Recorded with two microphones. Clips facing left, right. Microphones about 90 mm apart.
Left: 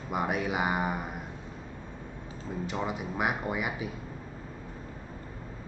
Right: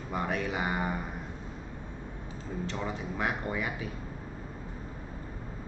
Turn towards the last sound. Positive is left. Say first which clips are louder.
# left 2 dB
turn(degrees=15)  # may be behind; listen again after turning